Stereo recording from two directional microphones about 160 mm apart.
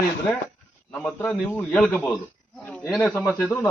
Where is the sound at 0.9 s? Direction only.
5° left (ahead or behind).